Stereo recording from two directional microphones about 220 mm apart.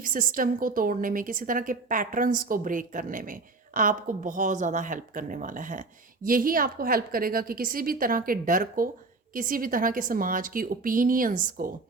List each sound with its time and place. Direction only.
0.0 s a woman's voice: 40° right (ahead or behind)